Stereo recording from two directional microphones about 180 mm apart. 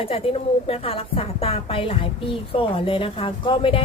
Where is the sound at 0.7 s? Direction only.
30° left (ahead or behind).